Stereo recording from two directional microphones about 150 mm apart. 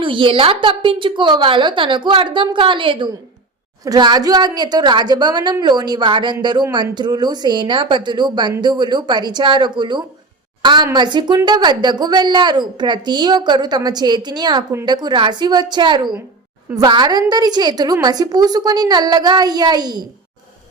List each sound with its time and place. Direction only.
0.0 s a woman's voice: 35° right (ahead or behind)